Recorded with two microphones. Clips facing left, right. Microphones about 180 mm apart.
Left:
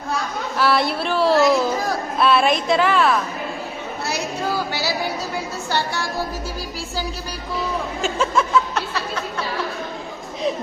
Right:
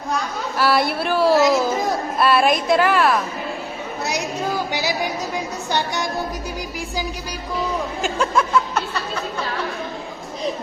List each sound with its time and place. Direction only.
0.6 s a woman's voice: 5° right (ahead or behind)
1.4 s a child's voice: 20° right (ahead or behind)
2.1 s a woman's voice: 5° right (ahead or behind)
4.0 s a sound: 15° right (ahead or behind)
5.7 s a child's voice: 20° right (ahead or behind)
8.0 s a sound: centre (ahead or behind)